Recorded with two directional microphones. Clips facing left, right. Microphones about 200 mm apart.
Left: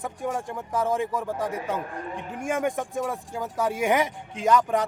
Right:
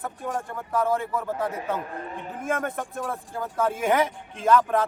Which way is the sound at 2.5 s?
15° left (ahead or behind).